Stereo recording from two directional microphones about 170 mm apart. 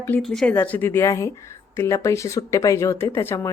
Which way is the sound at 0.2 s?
5° left (ahead or behind).